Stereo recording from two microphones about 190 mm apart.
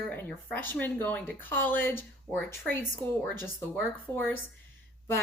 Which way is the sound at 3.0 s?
20° right (ahead or behind).